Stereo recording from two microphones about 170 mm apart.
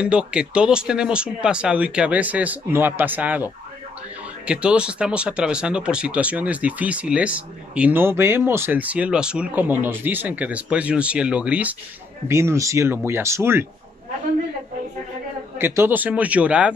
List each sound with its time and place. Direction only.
0.0 s speech: 5° right (ahead or behind)
4.5 s speech: 5° right (ahead or behind)
15.5 s speech: 15° right (ahead or behind)